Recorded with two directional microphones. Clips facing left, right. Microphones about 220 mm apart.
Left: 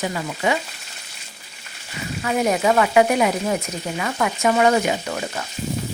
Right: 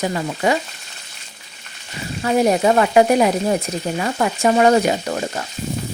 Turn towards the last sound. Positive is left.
turn(degrees=-35)  # may be behind; listen again after turning